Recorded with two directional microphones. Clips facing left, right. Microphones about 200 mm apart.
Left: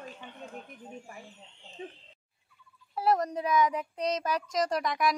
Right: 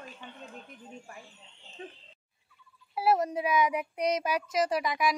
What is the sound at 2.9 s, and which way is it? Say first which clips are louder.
A child's voice: right 1 dB; 5° right (ahead or behind).